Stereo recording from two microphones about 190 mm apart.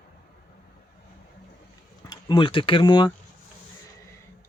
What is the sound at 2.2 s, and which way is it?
Speech, 25° left (ahead or behind).